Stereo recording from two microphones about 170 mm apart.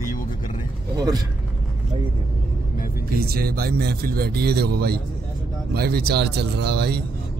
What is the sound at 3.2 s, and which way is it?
A man's voice, 65° right (ahead or behind).